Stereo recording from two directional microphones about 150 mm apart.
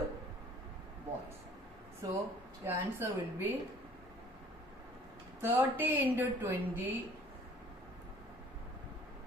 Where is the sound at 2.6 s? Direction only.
15° right (ahead or behind).